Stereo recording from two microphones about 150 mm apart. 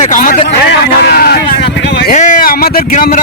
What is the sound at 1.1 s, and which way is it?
Speech, 90° left.